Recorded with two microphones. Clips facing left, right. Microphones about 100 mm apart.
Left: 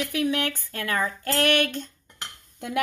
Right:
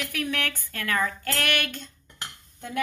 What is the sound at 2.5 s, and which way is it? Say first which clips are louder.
Speech: left 3 dB; 80° left.